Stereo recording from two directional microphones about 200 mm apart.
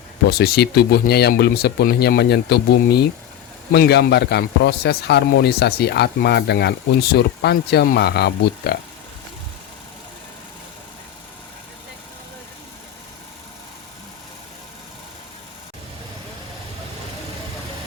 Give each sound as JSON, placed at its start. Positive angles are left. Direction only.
{"t": 0.3, "sound": "a man's voice", "side_deg": 50}